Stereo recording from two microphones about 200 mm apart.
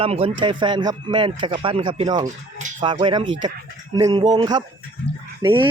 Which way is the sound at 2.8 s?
25° right (ahead or behind).